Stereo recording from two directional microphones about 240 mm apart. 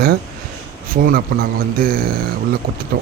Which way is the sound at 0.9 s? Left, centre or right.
Right.